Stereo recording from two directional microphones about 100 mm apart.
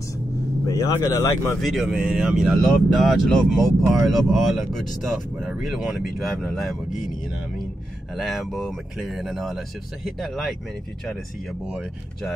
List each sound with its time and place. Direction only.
0.7 s speech: 30° left (ahead or behind)
1.6 s speech: centre (ahead or behind)
8.2 s speech: centre (ahead or behind)